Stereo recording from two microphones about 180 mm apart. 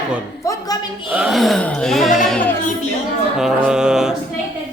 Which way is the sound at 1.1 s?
5° right (ahead or behind).